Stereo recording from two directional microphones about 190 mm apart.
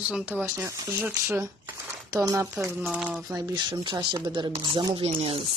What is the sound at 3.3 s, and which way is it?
Speech, 20° right (ahead or behind).